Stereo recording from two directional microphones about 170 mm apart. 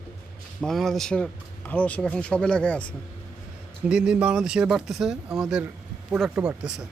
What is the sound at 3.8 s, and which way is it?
A man's voice, 5° right (ahead or behind).